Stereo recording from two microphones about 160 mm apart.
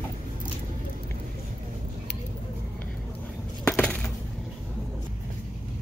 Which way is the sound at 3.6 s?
10° left (ahead or behind).